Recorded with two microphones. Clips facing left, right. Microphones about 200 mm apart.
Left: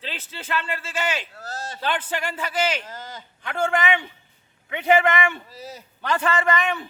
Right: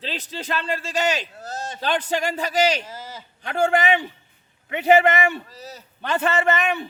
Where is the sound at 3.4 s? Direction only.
40° right (ahead or behind).